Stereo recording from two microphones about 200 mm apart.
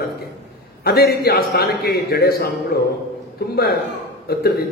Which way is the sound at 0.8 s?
50° left (ahead or behind).